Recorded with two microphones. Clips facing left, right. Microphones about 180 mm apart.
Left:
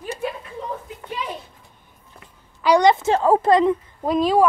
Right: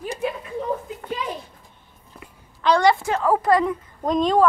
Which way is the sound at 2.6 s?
15° left (ahead or behind).